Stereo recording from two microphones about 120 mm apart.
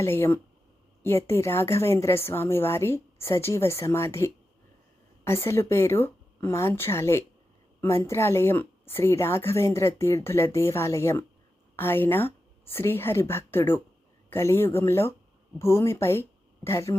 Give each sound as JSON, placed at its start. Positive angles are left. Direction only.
{"t": 0.0, "sound": "a woman's voice", "side_deg": 20}